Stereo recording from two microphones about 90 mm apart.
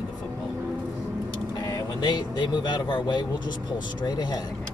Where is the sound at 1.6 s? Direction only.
45° left (ahead or behind).